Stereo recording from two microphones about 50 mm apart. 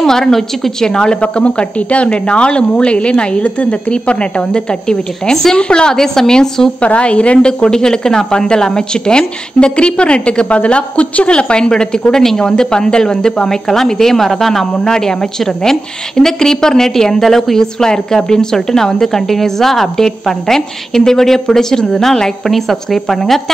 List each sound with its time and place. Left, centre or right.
0.0 s a woman's voice: centre
6.8 s a woman's voice: left; by 23.4 s centre